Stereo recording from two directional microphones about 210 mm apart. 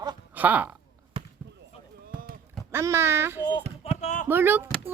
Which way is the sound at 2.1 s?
40° right (ahead or behind).